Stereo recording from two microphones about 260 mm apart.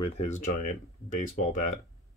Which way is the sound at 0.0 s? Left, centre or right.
Left.